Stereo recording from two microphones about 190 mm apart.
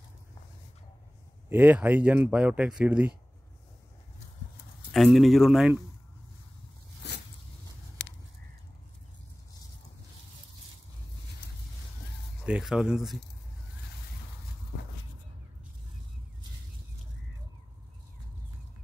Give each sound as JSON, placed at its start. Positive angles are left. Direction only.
{"t": 1.5, "sound": "speech", "side_deg": -10}
{"t": 4.9, "sound": "speech", "side_deg": 0}
{"t": 8.0, "sound": "a sound", "side_deg": 70}
{"t": 12.4, "sound": "speech", "side_deg": -5}